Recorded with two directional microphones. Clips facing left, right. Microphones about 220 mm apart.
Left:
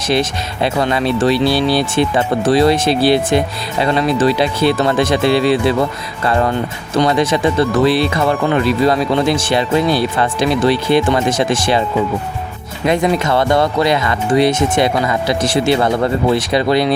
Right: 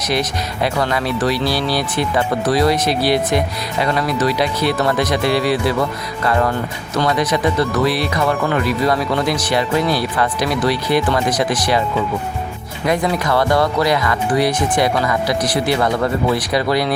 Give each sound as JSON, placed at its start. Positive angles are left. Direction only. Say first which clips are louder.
{"t": 0.0, "sound": "speech", "louder": "left 3 dB", "side_deg": 25}
{"t": 12.8, "sound": "speech", "louder": "left 3 dB", "side_deg": 25}